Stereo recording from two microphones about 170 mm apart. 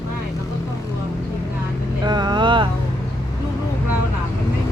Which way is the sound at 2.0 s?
25° right (ahead or behind).